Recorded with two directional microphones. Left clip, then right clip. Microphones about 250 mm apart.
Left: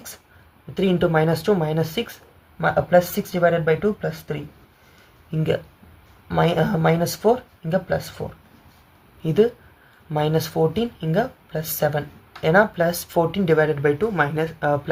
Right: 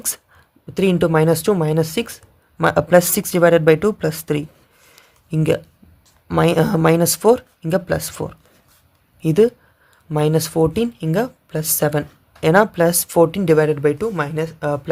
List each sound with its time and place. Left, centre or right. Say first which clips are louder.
0.7 s speech: right 3 dB; right
9.2 s speech: right 4 dB; right